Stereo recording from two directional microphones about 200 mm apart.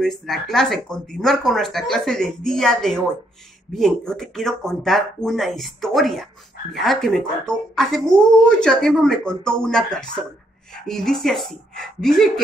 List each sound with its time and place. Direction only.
0.0 s speech: centre (ahead or behind)